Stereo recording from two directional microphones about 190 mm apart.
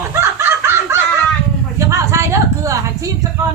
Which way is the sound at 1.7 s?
15° right (ahead or behind).